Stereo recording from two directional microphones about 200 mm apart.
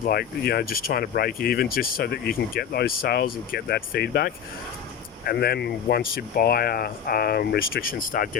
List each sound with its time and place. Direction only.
0.0 s speech: 50° left (ahead or behind)